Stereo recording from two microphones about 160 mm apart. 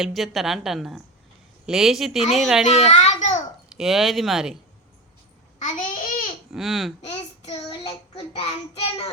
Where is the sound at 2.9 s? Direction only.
45° left (ahead or behind).